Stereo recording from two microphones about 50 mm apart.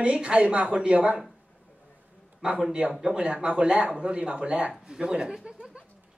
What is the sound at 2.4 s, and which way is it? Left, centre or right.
Speech, centre.